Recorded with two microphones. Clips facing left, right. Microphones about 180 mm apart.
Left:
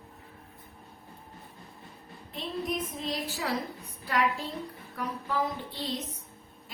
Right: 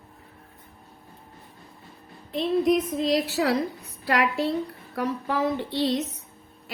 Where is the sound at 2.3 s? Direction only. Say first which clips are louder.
Right 11 dB; 85° right.